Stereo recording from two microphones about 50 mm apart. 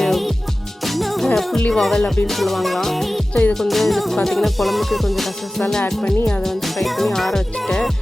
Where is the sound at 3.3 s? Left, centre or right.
Left.